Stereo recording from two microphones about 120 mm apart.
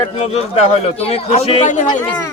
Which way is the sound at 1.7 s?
90° left.